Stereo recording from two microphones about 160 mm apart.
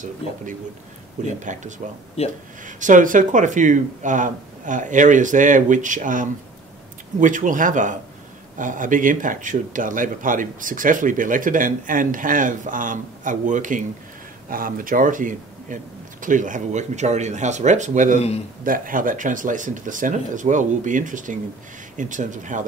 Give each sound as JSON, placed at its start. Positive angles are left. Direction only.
{"t": 1.4, "sound": "speech", "side_deg": -50}
{"t": 2.2, "sound": "speech", "side_deg": 40}
{"t": 2.6, "sound": "speech", "side_deg": -55}